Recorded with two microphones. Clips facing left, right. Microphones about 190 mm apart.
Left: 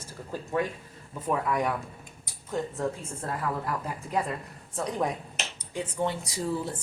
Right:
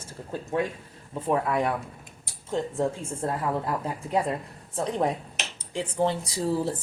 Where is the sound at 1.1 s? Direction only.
25° right (ahead or behind).